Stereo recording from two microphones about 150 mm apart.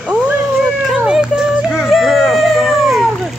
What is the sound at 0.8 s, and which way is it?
Music, 5° right (ahead or behind).